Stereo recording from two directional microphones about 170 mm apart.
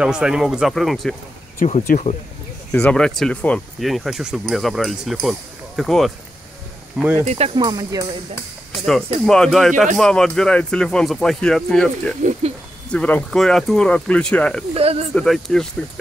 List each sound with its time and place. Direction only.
0.0 s speech: 5° right (ahead or behind)
1.6 s speech: 50° left (ahead or behind)
2.7 s speech: 5° left (ahead or behind)
7.0 s speech: 10° right (ahead or behind)
7.2 s speech: 35° right (ahead or behind)
7.6 s speech: 20° right (ahead or behind)
9.2 s speech: centre (ahead or behind)
12.2 s speech: 45° right (ahead or behind)
12.9 s speech: 5° left (ahead or behind)
14.8 s speech: 35° right (ahead or behind)
15.1 s speech: centre (ahead or behind)